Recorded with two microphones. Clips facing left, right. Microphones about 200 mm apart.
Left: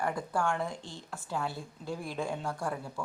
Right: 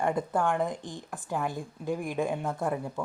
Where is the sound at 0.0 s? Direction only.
20° right (ahead or behind).